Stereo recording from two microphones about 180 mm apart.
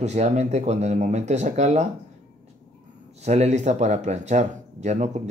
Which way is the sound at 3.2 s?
40° right (ahead or behind).